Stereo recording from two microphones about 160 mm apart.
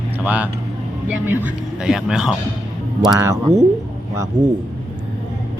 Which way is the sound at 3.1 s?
20° right (ahead or behind).